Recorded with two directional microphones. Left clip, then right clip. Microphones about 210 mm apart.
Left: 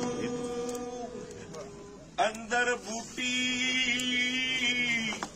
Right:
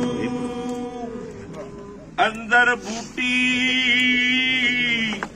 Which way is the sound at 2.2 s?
Centre (ahead or behind).